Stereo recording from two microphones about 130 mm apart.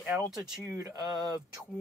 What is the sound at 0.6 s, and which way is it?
Speech, 25° right (ahead or behind).